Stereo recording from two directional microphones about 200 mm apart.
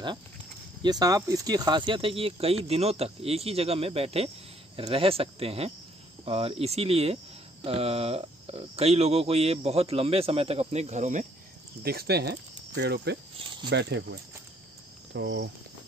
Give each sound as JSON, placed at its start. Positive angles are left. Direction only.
{"t": 0.8, "sound": "speech", "side_deg": -20}
{"t": 11.8, "sound": "speech", "side_deg": -50}
{"t": 15.1, "sound": "speech", "side_deg": -60}